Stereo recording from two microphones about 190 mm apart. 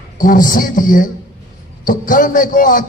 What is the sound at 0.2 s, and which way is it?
A man's voice, 45° left (ahead or behind).